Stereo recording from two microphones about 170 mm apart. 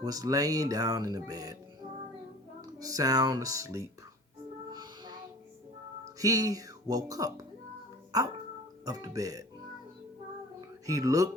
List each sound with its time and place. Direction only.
0.0 s speech: 20° right (ahead or behind)
2.6 s speech: 20° right (ahead or behind)
4.7 s music: 25° right (ahead or behind)
6.1 s speech: 20° right (ahead or behind)
10.8 s speech: 20° right (ahead or behind)